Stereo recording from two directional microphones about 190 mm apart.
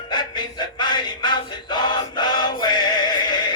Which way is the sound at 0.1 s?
25° left (ahead or behind).